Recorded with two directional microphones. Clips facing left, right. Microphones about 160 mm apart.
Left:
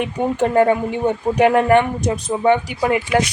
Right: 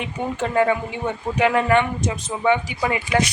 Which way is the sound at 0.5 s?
45° left (ahead or behind).